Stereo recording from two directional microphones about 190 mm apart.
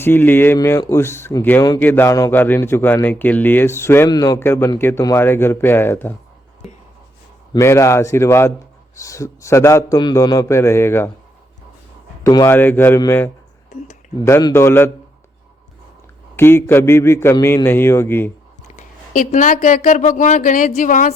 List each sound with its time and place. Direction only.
0.0 s speech: 10° left (ahead or behind)
7.5 s speech: 15° left (ahead or behind)
12.2 s speech: 15° left (ahead or behind)
16.3 s speech: 10° left (ahead or behind)
18.8 s speech: 40° left (ahead or behind)